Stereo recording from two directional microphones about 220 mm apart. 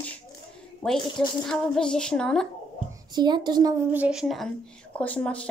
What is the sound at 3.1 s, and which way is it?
Speech, 20° right (ahead or behind).